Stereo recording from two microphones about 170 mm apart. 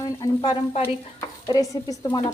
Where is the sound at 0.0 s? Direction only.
20° left (ahead or behind).